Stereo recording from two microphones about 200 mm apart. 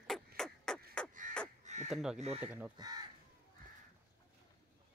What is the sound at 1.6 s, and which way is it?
Crow, 35° right (ahead or behind).